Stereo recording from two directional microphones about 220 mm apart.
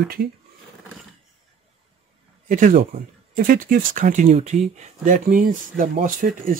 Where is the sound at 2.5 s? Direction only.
35° right (ahead or behind).